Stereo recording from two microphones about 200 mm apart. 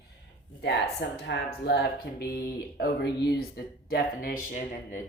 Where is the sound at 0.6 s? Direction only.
60° left (ahead or behind).